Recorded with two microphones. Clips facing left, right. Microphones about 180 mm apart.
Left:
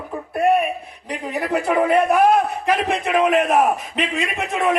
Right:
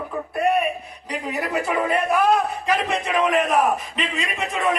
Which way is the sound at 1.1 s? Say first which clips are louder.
Left 3 dB; 55° left (ahead or behind).